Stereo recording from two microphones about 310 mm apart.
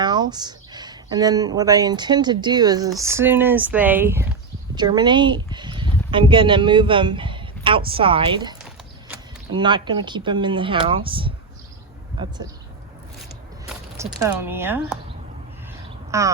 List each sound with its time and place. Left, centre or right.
0.0 s speech: centre
13.7 s speech: centre
16.1 s speech: centre